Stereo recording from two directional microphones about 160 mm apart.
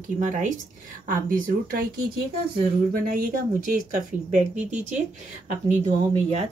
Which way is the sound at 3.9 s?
50° right (ahead or behind).